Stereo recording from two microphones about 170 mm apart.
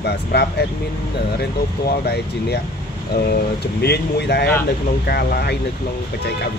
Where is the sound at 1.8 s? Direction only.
75° left (ahead or behind).